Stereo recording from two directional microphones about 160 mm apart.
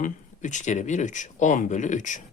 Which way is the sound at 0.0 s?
50° left (ahead or behind).